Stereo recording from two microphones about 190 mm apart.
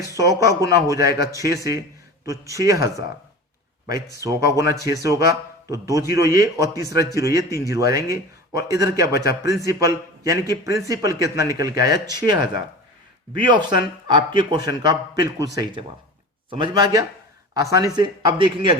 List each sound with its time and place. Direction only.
0.2 s a man's voice: 15° right (ahead or behind)